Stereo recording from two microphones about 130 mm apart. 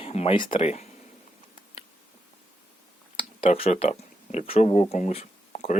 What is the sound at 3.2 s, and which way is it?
Speech, 45° left (ahead or behind).